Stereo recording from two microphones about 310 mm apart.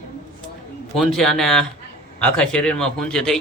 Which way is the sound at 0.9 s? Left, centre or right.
Centre.